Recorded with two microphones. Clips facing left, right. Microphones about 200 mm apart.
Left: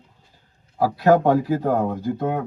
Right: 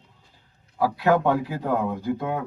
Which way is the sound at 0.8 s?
40° left (ahead or behind).